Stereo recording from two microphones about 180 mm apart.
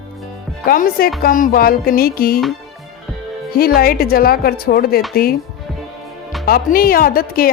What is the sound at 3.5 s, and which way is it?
A woman's voice, 55° left (ahead or behind).